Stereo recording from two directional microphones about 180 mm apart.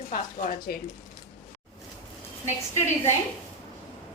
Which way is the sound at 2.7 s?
15° left (ahead or behind).